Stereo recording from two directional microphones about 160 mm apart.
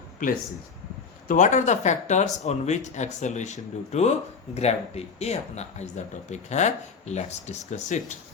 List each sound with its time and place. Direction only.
1.3 s speech: 50° left (ahead or behind)